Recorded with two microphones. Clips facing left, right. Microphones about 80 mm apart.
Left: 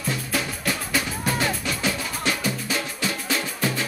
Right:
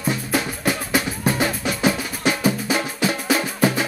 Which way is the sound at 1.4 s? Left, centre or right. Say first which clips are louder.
Right 4 dB; right.